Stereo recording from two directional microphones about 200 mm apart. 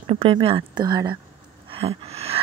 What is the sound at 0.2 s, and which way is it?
Speech, 30° right (ahead or behind).